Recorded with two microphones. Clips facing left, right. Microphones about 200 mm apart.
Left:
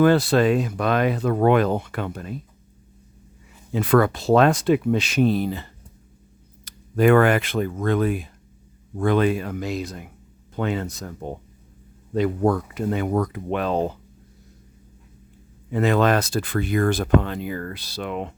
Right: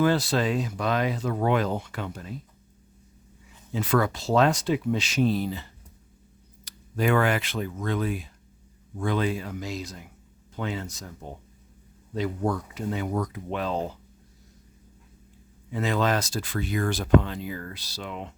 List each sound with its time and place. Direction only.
0.0 s speech: 60° left (ahead or behind)
3.7 s speech: 60° left (ahead or behind)
15.7 s speech: 60° left (ahead or behind)